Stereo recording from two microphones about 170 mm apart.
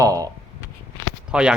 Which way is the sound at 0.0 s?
20° right (ahead or behind).